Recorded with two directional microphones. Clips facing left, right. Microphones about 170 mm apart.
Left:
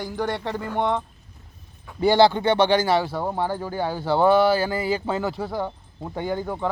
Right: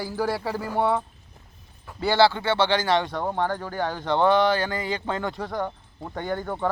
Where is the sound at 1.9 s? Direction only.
15° left (ahead or behind).